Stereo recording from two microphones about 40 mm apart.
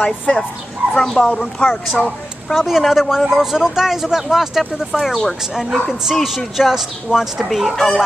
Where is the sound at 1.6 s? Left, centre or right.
Left.